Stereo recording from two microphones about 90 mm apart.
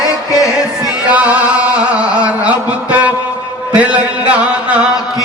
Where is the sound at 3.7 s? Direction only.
15° right (ahead or behind).